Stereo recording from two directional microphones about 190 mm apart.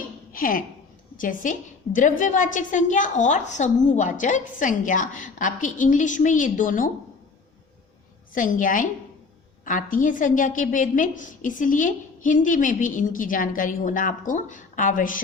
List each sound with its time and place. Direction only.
0.3 s a woman's voice: 45° left (ahead or behind)
8.3 s a woman's voice: 45° left (ahead or behind)